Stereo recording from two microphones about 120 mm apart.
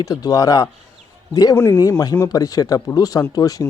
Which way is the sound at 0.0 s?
30° left (ahead or behind).